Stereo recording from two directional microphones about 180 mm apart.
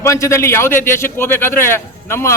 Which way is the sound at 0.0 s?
15° left (ahead or behind).